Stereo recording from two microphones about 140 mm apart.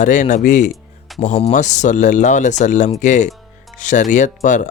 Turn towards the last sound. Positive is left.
turn(degrees=60)  # may be behind; listen again after turning